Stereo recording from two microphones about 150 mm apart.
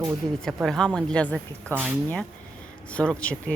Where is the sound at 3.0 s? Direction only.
5° left (ahead or behind).